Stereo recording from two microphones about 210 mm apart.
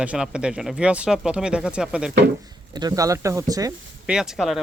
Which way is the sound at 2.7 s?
15° right (ahead or behind).